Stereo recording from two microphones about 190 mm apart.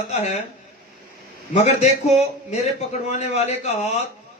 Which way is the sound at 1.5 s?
40° left (ahead or behind).